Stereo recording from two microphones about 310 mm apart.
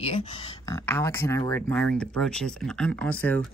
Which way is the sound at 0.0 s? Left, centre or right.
Centre.